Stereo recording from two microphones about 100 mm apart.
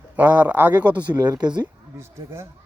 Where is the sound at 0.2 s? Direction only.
15° right (ahead or behind).